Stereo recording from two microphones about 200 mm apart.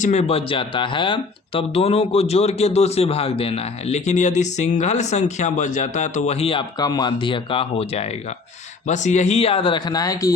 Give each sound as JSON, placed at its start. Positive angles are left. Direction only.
{"t": 0.0, "sound": "speech", "side_deg": 35}